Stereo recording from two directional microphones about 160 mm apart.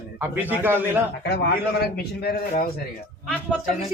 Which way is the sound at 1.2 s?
90° left.